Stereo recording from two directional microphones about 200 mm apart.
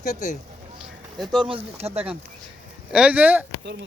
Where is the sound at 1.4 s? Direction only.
25° right (ahead or behind).